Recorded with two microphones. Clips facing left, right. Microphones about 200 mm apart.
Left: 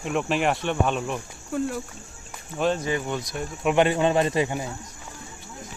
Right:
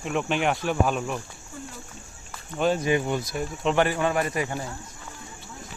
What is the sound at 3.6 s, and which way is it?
Speech, 15° left (ahead or behind).